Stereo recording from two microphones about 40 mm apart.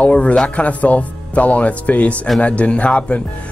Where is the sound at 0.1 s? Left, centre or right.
Left.